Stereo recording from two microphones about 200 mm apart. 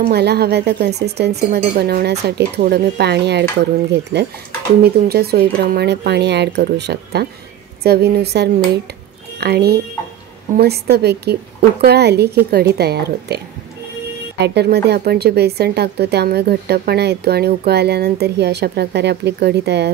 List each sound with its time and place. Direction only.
0.0 s speech: 55° right (ahead or behind)
14.4 s speech: 55° right (ahead or behind)